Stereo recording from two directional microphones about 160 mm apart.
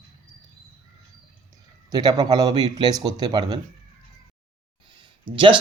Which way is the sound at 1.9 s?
25° right (ahead or behind).